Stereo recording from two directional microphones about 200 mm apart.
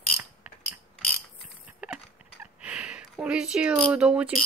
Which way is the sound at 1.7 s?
5° right (ahead or behind).